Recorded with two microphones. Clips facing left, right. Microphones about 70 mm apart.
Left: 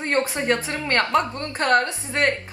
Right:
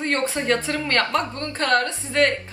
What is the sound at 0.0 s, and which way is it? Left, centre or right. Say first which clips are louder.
A woman's voice: left 1 dB; left.